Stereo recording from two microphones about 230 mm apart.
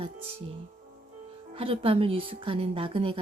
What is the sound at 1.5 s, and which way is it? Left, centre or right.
Speech, right.